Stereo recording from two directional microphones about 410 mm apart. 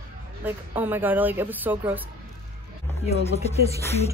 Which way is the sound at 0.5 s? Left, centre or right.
Centre.